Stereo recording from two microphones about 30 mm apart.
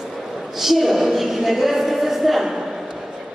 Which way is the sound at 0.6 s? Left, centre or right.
Centre.